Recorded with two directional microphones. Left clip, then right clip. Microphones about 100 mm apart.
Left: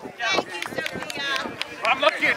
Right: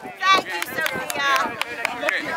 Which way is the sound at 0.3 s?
30° right (ahead or behind).